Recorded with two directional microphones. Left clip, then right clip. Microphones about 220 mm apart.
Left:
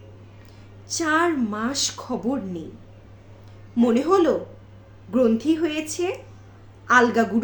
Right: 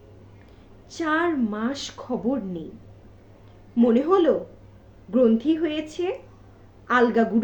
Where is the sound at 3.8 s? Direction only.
15° left (ahead or behind).